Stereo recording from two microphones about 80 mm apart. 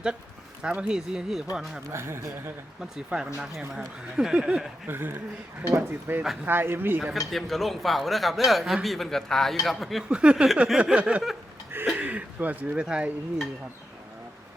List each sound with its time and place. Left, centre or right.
0.6 s speech: centre
1.9 s speech: right
2.9 s speech: centre
4.9 s a man's voice: right
7.0 s speech: centre
10.1 s speech: centre
11.9 s a sound: centre
12.8 s speech: centre